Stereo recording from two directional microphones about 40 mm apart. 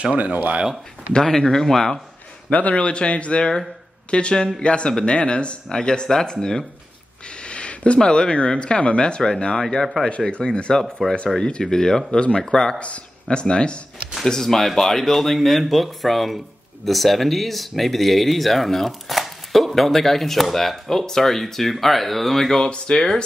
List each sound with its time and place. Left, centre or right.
0.1 s speech: right
1.4 s speech: centre
2.5 s a man's voice: left
2.8 s speech: left
10.7 s speech: centre
12.7 s speech: left
14.2 s speech: centre
22.7 s speech: left